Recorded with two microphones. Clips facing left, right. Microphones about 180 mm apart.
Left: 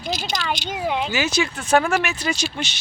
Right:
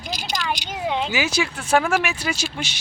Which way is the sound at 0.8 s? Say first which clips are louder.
Even; 5° left (ahead or behind).